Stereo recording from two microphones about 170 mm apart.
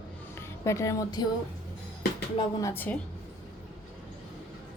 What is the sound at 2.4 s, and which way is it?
Speech, 20° left (ahead or behind).